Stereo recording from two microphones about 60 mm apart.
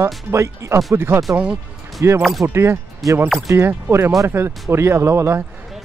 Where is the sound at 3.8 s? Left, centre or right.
Right.